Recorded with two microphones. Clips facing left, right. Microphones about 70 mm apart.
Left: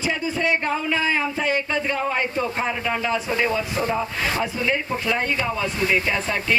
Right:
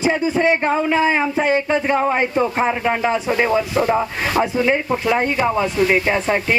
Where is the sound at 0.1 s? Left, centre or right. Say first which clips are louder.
Right 5 dB; right.